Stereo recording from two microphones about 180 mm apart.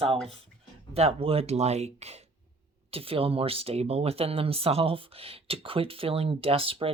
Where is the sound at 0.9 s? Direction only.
35° right (ahead or behind).